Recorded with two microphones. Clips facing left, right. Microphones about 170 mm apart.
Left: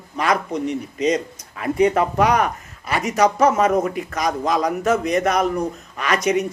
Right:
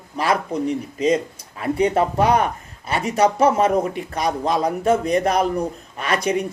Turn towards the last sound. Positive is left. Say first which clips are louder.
# left 1 dB
turn(degrees=-30)  # may be behind; listen again after turning